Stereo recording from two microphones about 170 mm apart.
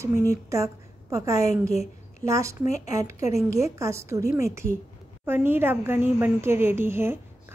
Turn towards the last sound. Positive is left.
turn(degrees=-15)  # may be behind; listen again after turning